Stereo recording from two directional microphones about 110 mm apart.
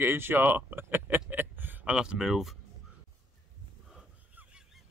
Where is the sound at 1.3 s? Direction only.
15° right (ahead or behind).